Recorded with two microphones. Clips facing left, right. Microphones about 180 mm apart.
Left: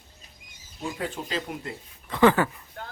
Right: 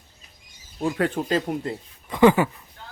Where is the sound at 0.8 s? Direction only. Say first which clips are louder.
Right 8 dB; 60° right (ahead or behind).